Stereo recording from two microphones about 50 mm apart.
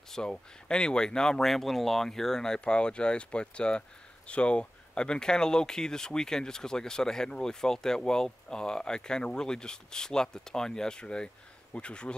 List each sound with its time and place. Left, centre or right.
0.1 s speech: centre